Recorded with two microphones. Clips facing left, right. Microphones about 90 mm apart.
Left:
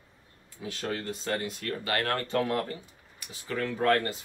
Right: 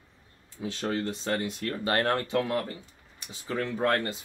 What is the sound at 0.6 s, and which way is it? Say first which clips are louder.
Speech: right 4 dB; 30° right (ahead or behind).